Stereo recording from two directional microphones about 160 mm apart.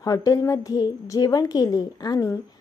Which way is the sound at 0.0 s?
20° left (ahead or behind).